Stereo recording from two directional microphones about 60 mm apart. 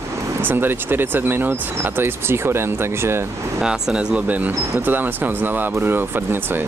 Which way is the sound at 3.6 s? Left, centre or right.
Centre.